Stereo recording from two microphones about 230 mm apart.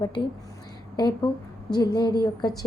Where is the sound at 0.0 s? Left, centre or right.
Left.